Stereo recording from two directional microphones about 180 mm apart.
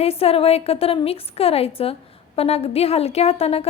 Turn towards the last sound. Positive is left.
turn(degrees=35)  # may be behind; listen again after turning